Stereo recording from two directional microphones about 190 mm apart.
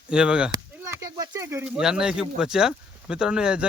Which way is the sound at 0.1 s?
5° right (ahead or behind).